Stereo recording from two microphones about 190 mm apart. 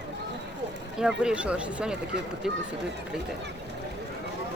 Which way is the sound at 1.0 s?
5° right (ahead or behind).